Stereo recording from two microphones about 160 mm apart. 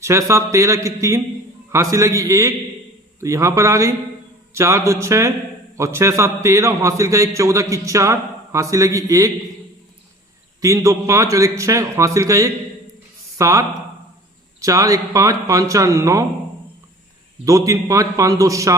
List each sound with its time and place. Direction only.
0.0 s a man's voice: 20° right (ahead or behind)
10.6 s a man's voice: 20° right (ahead or behind)
17.4 s a man's voice: 20° right (ahead or behind)